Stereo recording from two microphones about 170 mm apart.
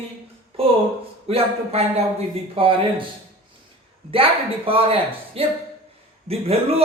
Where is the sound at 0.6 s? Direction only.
35° right (ahead or behind).